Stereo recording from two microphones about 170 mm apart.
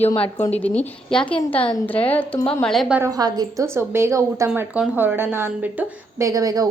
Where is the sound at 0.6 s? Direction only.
10° left (ahead or behind).